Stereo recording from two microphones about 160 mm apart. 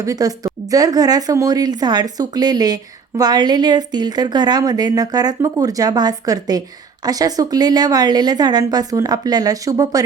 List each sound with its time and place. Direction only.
0.0 s speech: 20° right (ahead or behind)